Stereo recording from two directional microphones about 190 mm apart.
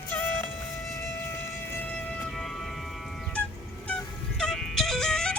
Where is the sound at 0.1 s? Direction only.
10° left (ahead or behind).